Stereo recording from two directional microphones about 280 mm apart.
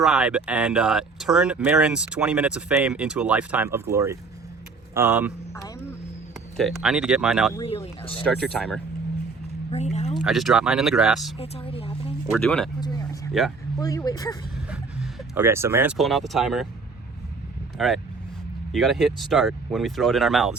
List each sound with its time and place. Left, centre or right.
0.0 s speech: centre
6.6 s speech: centre
7.5 s speech: centre
8.4 s speech: centre
9.7 s speech: left
10.2 s speech: centre
11.3 s a woman's voice: left
12.3 s speech: centre
12.8 s a sound: centre
13.7 s speech: centre
14.7 s speech: centre
17.7 s speech: centre